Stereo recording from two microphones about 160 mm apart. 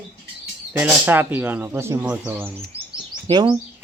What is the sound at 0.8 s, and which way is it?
Speech, 10° right (ahead or behind).